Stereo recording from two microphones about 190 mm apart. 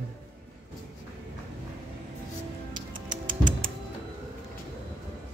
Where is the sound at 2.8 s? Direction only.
45° right (ahead or behind).